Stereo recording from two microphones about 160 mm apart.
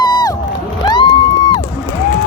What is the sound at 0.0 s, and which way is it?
Crowd, 25° left (ahead or behind).